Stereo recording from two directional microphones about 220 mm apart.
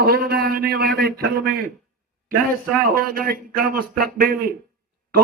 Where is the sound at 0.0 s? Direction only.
45° right (ahead or behind).